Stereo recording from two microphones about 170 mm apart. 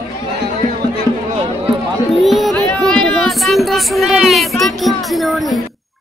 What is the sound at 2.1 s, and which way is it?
Music, centre (ahead or behind).